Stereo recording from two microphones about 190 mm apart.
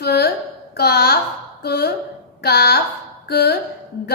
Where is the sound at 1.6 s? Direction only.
55° left (ahead or behind).